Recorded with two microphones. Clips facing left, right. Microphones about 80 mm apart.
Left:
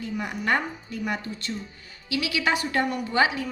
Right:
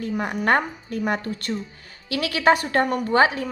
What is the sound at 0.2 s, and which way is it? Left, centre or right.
A woman's voice, right.